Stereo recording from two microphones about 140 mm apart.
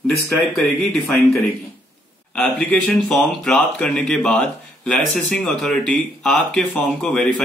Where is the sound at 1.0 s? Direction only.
Centre (ahead or behind).